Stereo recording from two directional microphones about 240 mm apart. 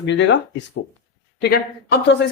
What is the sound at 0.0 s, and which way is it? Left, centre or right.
Speech, left.